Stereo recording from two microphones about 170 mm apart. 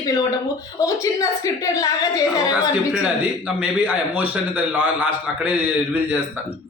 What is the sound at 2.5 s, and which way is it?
A man's voice, 5° right (ahead or behind).